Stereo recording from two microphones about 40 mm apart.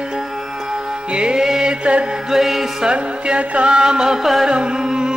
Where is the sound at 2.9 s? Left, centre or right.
Right.